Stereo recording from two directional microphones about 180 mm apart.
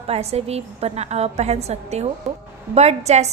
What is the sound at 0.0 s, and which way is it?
A woman's voice, 35° right (ahead or behind).